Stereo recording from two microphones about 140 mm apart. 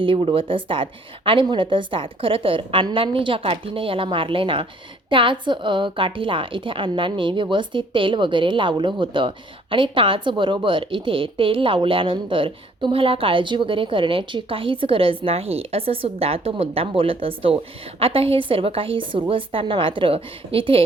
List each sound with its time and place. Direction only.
0.0 s a woman's voice: 35° right (ahead or behind)